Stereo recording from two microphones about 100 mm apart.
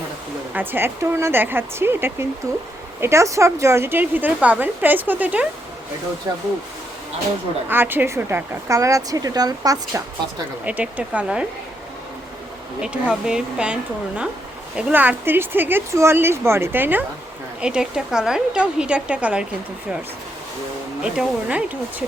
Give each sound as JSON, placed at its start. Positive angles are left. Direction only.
{"t": 0.5, "sound": "speech", "side_deg": -20}
{"t": 6.3, "sound": "a woman's voice", "side_deg": -35}
{"t": 7.7, "sound": "a woman's voice", "side_deg": -20}
{"t": 10.7, "sound": "a woman's voice", "side_deg": -15}
{"t": 12.8, "sound": "a woman's voice", "side_deg": -10}
{"t": 14.8, "sound": "speech", "side_deg": -15}
{"t": 17.6, "sound": "a woman's voice", "side_deg": -10}
{"t": 21.0, "sound": "a woman's voice", "side_deg": -10}